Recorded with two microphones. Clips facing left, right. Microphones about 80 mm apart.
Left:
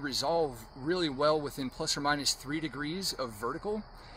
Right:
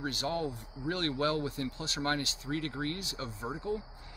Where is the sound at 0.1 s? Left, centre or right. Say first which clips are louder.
Left 4 dB; left.